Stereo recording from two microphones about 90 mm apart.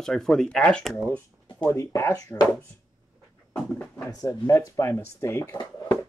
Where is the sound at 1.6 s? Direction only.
30° left (ahead or behind).